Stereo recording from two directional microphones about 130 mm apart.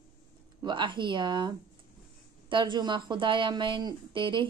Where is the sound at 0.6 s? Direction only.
35° right (ahead or behind).